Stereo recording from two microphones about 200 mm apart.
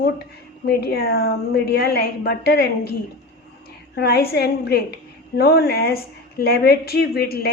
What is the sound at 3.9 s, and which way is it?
A woman's voice, 50° left (ahead or behind).